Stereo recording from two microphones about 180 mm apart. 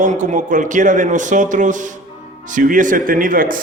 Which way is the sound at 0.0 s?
45° right (ahead or behind).